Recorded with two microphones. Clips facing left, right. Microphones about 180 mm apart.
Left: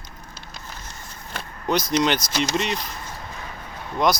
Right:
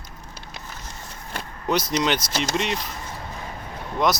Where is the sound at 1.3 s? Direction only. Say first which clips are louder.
Even; 5° right (ahead or behind).